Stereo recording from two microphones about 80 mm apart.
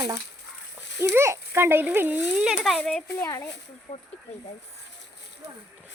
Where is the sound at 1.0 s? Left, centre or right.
Right.